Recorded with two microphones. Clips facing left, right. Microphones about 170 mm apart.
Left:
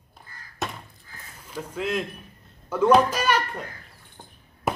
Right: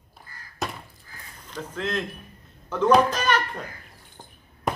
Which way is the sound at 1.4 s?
10° left (ahead or behind).